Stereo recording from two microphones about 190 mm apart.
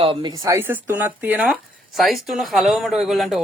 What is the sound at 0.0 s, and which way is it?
Speech, 25° right (ahead or behind).